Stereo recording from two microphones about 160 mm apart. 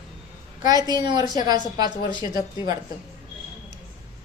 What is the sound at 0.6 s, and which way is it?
A woman's voice, 25° right (ahead or behind).